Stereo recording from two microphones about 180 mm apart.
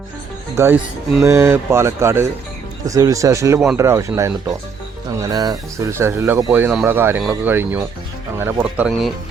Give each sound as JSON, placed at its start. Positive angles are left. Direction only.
{"t": 0.5, "sound": "speech", "side_deg": -15}